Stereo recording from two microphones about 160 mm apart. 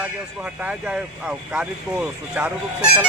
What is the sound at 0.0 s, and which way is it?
Speech, 10° right (ahead or behind).